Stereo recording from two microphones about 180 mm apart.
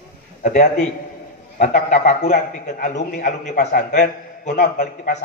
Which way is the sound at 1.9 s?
40° left (ahead or behind).